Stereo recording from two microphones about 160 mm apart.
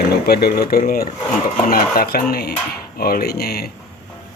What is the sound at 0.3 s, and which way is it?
Speech, 75° left (ahead or behind).